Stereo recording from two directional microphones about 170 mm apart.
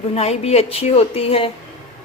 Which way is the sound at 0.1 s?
35° left (ahead or behind).